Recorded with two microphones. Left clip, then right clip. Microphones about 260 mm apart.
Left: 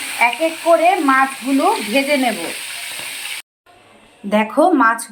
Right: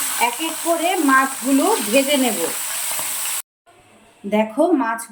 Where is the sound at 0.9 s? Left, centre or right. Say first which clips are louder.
Left 3 dB; centre.